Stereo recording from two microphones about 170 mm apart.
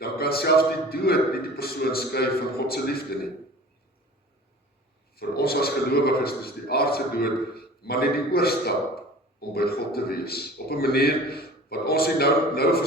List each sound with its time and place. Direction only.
0.0 s a man's voice: 65° left (ahead or behind)
5.1 s a man's voice: 65° left (ahead or behind)